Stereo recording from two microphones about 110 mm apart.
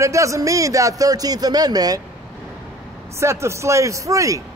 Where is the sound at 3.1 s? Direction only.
25° right (ahead or behind).